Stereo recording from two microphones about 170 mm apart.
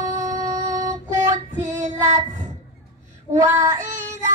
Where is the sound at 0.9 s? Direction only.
45° right (ahead or behind).